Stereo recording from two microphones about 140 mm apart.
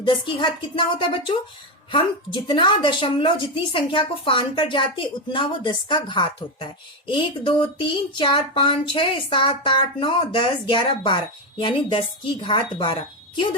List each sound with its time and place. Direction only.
0.0 s a woman's voice: 35° left (ahead or behind)